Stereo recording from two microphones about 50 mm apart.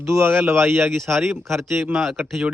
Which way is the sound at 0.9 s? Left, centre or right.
Centre.